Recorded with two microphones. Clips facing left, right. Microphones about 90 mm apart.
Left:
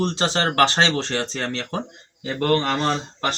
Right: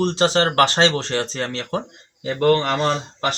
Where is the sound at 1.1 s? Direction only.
20° right (ahead or behind).